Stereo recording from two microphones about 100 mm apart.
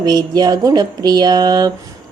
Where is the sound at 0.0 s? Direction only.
40° right (ahead or behind).